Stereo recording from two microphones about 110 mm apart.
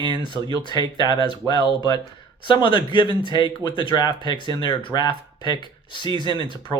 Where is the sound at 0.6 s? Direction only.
45° left (ahead or behind).